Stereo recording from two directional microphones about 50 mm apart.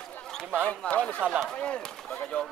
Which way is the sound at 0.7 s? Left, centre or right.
Left.